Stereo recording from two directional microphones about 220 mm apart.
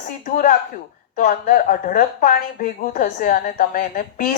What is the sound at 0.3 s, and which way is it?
Speech, 35° left (ahead or behind).